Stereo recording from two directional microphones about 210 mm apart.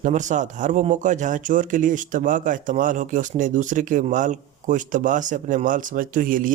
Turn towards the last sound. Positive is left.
turn(degrees=-40)  # may be behind; listen again after turning